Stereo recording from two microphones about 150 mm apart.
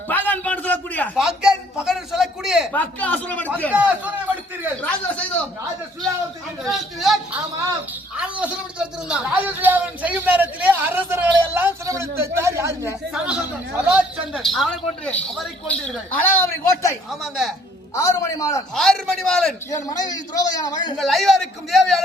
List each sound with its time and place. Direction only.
0.1 s a sound: 10° left (ahead or behind)
1.1 s a man's voice: 5° right (ahead or behind)
2.7 s speech: 10° left (ahead or behind)
3.7 s a man's voice: 10° right (ahead or behind)
4.8 s a sound: 10° left (ahead or behind)
6.7 s a man's voice: centre (ahead or behind)
8.1 s a sound: 5° right (ahead or behind)
13.2 s a sound: 5° right (ahead or behind)
14.3 s speech: centre (ahead or behind); by 17.0 s 15° left (ahead or behind)
17.1 s a man's voice: centre (ahead or behind)
17.9 s a man's voice: 20° left (ahead or behind)
18.7 s a man's voice: 5° left (ahead or behind)
19.7 s a man's voice: 25° left (ahead or behind)
21.0 s a man's voice: centre (ahead or behind)